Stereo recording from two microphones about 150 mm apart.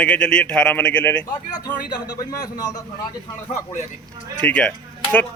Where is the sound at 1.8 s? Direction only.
25° left (ahead or behind).